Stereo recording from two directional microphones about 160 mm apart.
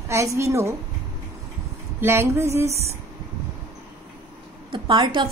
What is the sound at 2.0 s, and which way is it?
Speech, 15° right (ahead or behind).